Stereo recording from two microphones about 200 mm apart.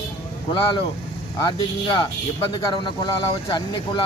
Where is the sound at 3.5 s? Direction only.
25° left (ahead or behind).